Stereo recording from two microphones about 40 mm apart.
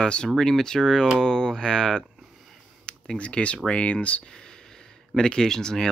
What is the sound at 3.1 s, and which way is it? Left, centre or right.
Speech, left.